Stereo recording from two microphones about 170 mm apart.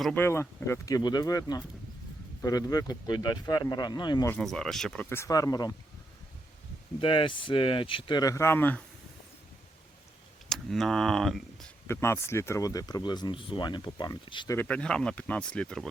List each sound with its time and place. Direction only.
0.0 s speech: 10° left (ahead or behind)
4.3 s speech: 5° left (ahead or behind)
5.0 s speech: 15° left (ahead or behind)
7.0 s speech: 30° left (ahead or behind); by 8.8 s 10° left (ahead or behind)
10.5 s speech: centre (ahead or behind)
11.9 s speech: 15° left (ahead or behind)
14.5 s speech: 10° left (ahead or behind)